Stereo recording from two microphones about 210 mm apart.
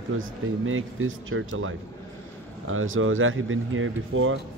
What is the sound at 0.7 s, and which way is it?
Speech, 75° right (ahead or behind).